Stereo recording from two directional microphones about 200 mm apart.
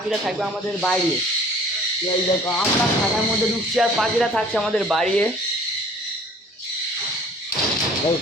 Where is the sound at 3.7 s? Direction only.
Centre (ahead or behind).